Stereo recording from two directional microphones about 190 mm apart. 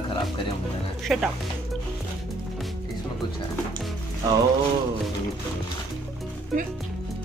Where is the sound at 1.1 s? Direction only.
Centre (ahead or behind).